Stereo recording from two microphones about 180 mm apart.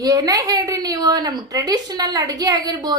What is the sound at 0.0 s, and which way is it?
A woman's voice, 20° right (ahead or behind).